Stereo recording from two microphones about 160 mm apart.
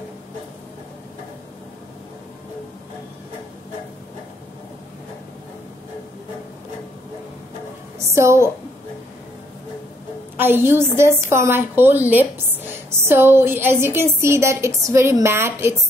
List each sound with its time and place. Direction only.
8.1 s a woman's voice: 15° right (ahead or behind)
10.3 s a woman's voice: 15° right (ahead or behind)